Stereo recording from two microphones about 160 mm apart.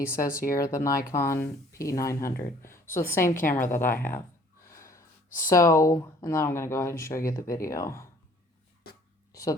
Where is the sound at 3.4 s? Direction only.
55° left (ahead or behind).